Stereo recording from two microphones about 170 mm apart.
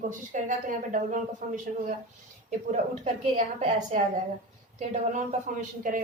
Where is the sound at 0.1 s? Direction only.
50° right (ahead or behind).